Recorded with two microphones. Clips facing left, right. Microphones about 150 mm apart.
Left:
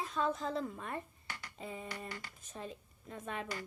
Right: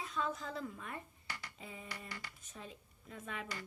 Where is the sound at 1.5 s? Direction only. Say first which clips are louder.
Left 6 dB; 40° left (ahead or behind).